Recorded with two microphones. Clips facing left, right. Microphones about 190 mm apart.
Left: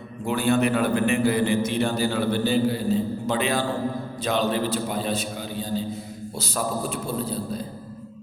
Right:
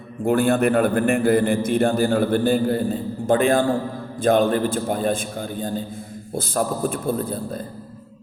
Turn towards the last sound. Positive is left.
turn(degrees=-50)  # may be behind; listen again after turning